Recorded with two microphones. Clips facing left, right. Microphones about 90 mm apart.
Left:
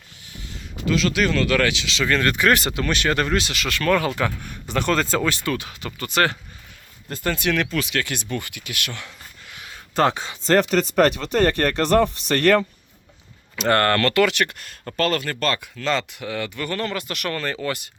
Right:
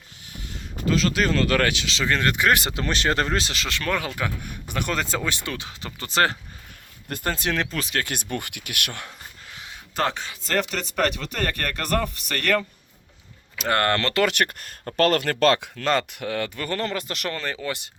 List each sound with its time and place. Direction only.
0.4 s speech: 40° right (ahead or behind)
2.0 s speech: 20° right (ahead or behind)
2.7 s speech: 30° right (ahead or behind); by 9.1 s 50° right (ahead or behind)
9.5 s a sound: 30° right (ahead or behind)
9.9 s speech: centre (ahead or behind)
10.4 s speech: 40° left (ahead or behind)
13.6 s speech: 10° right (ahead or behind); by 14.3 s 30° right (ahead or behind)
14.3 s speech: 45° right (ahead or behind); by 15.7 s 75° right (ahead or behind)
15.7 s speech: 50° right (ahead or behind); by 17.3 s 30° right (ahead or behind)
17.3 s speech: 15° right (ahead or behind)